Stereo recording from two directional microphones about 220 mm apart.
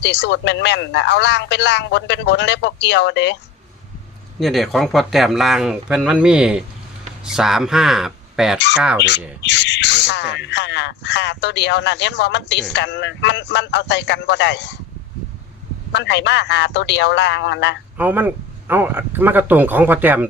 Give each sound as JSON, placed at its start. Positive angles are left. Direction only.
{"t": 0.0, "sound": "speech", "side_deg": 50}
{"t": 4.4, "sound": "speech", "side_deg": 0}
{"t": 8.5, "sound": "speech", "side_deg": 50}
{"t": 15.9, "sound": "speech", "side_deg": 50}
{"t": 17.9, "sound": "speech", "side_deg": -10}